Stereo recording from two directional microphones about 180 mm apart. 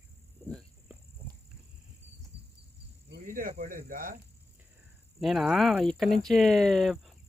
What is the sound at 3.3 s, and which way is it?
Speech, 55° right (ahead or behind).